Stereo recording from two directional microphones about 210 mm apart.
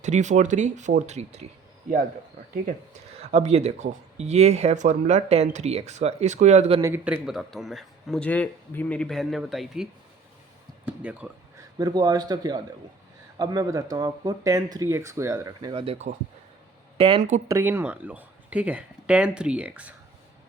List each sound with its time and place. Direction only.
0.0 s speech: 35° right (ahead or behind)
3.2 s speech: 30° right (ahead or behind)
6.8 s a man's voice: 10° right (ahead or behind)
11.8 s a man's voice: 20° right (ahead or behind)
15.7 s a man's voice: 25° right (ahead or behind)
17.5 s a man's voice: 10° right (ahead or behind)